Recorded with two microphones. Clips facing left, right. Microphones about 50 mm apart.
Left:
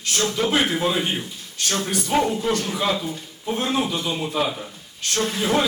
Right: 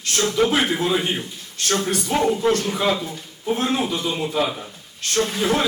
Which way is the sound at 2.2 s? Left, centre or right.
Centre.